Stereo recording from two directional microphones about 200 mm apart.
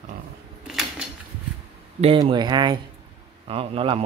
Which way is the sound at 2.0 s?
25° right (ahead or behind).